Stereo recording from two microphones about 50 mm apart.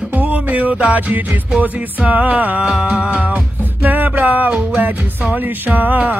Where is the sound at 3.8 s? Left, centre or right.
Right.